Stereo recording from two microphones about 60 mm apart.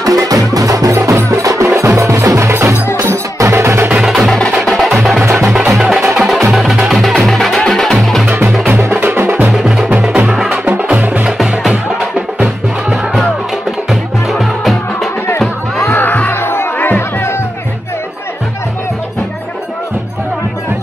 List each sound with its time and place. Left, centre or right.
0.0 s music: right
1.7 s wood block: right
3.0 s music: right
4.1 s music: centre
5.2 s music: right
5.7 s music: centre
8.8 s music: right
9.5 s music: centre
10.6 s music: right
10.9 s music: right
12.9 s music: centre
16.0 s music: left
16.3 s music: left